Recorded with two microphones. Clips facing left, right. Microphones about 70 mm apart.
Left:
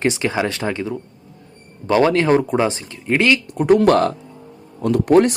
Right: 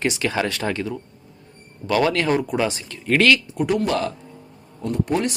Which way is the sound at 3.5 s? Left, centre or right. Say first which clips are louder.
Left 7 dB; left.